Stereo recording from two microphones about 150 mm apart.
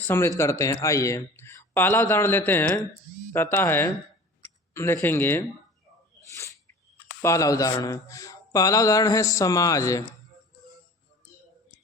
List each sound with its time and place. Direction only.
0.1 s a man's voice: 15° left (ahead or behind)
7.2 s speech: 20° left (ahead or behind)